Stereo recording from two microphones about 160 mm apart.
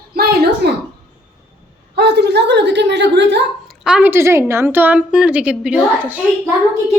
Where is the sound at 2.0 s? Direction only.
90° right.